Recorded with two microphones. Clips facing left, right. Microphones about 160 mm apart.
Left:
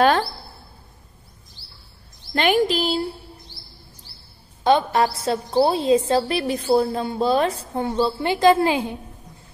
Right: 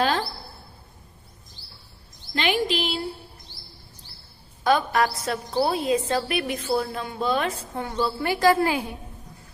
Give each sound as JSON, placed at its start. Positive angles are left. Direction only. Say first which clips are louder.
{"t": 2.3, "sound": "speech", "louder": "left 5 dB", "side_deg": 45}
{"t": 4.6, "sound": "a woman's voice", "louder": "left 3 dB", "side_deg": 25}